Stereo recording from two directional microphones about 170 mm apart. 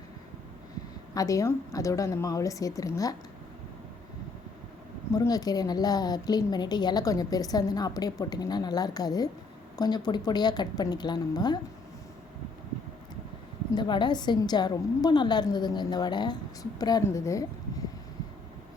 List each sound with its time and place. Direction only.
1.1 s a woman's voice: 20° left (ahead or behind)
5.1 s a woman's voice: 20° left (ahead or behind)
13.7 s a woman's voice: 25° left (ahead or behind)